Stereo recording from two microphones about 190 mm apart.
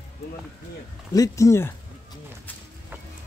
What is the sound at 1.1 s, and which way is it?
Speech, 15° left (ahead or behind).